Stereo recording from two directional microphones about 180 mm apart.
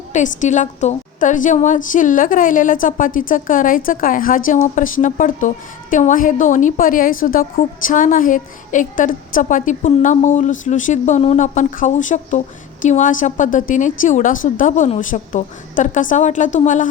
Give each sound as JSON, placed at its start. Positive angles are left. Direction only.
{"t": 0.1, "sound": "a woman's voice", "side_deg": 40}